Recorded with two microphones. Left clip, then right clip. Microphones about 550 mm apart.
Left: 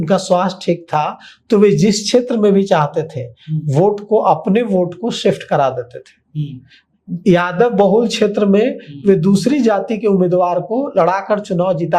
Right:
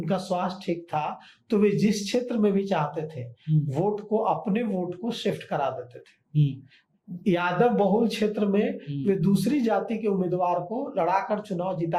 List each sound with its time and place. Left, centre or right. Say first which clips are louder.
0.0 s a man's voice: left 13 dB; left
7.3 s a man's voice: left 10 dB; left